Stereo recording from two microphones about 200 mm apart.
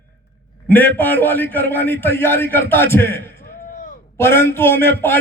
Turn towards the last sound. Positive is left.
turn(degrees=10)  # may be behind; listen again after turning